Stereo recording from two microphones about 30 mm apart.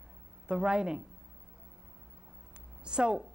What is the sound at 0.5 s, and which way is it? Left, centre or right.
Speech, right.